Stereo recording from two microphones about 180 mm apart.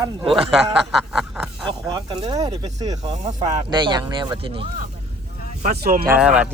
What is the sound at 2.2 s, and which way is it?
Stir, 35° right (ahead or behind).